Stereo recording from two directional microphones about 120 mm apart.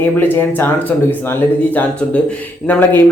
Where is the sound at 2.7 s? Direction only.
15° left (ahead or behind).